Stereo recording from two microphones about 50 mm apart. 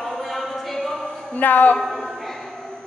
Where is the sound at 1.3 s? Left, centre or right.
Left.